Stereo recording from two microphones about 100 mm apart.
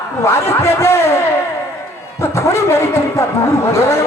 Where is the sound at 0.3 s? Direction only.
25° left (ahead or behind).